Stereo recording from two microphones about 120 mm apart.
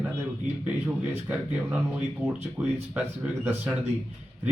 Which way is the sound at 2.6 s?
25° right (ahead or behind).